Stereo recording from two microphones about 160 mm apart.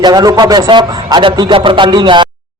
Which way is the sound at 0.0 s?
25° right (ahead or behind).